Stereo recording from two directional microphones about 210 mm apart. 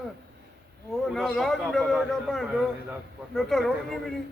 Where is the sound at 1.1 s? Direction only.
Centre (ahead or behind).